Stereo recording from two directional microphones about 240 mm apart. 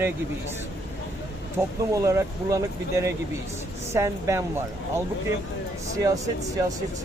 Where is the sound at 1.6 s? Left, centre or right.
Centre.